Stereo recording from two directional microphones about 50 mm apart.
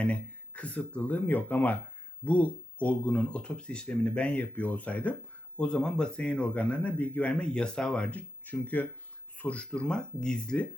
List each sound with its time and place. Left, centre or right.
0.0 s speech: left
5.5 s speech: centre
8.6 s speech: left; by 10.7 s centre